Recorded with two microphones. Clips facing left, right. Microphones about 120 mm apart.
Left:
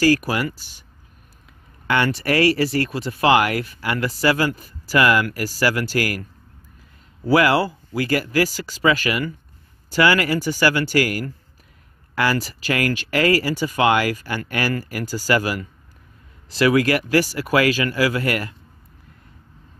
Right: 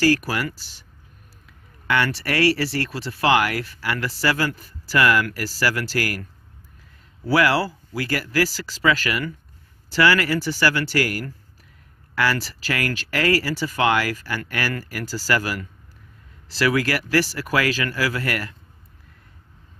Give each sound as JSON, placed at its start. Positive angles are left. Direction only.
{"t": 0.0, "sound": "speech", "side_deg": 15}
{"t": 1.9, "sound": "speech", "side_deg": 20}
{"t": 7.2, "sound": "speech", "side_deg": 20}